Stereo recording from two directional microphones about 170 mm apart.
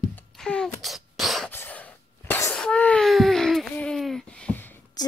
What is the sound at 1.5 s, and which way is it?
Sneeze, 10° left (ahead or behind).